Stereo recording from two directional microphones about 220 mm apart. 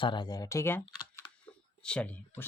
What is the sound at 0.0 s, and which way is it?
Speech, 20° left (ahead or behind).